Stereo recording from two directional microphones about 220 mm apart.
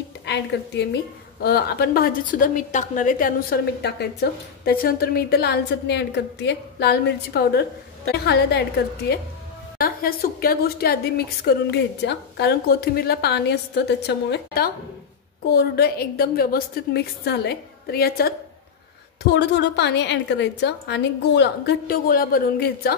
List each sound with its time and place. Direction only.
0.2 s a woman's voice: 50° left (ahead or behind)